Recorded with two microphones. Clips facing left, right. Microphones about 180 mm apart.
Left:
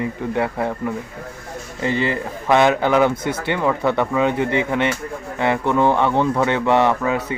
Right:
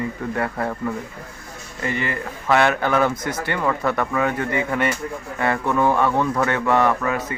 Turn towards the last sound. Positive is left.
turn(degrees=15)  # may be behind; listen again after turning